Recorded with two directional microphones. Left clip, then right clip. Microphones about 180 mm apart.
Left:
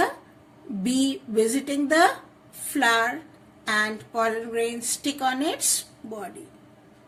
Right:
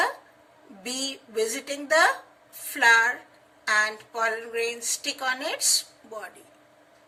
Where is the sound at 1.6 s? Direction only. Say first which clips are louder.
Right 1 dB; 25° left (ahead or behind).